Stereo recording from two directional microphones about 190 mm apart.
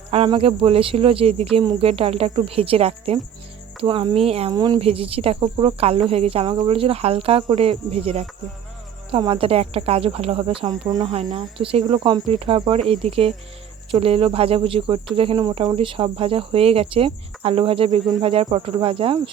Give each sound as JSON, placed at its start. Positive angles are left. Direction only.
{"t": 0.1, "sound": "speech", "side_deg": -30}
{"t": 9.0, "sound": "cricket", "side_deg": -30}
{"t": 12.9, "sound": "speech", "side_deg": -30}
{"t": 13.9, "sound": "cricket", "side_deg": -30}